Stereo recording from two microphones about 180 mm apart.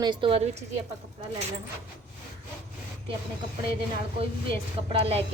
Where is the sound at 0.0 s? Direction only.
25° right (ahead or behind).